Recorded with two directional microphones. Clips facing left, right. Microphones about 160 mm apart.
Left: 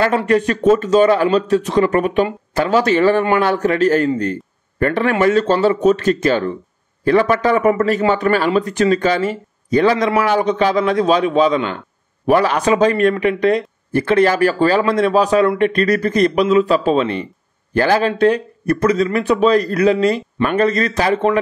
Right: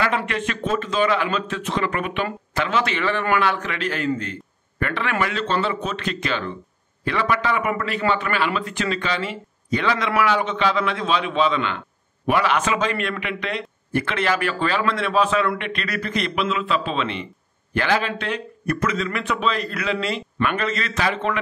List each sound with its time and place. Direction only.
0.0 s speech: 40° left (ahead or behind)